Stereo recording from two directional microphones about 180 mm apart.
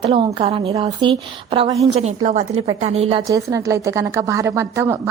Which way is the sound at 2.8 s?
35° right (ahead or behind).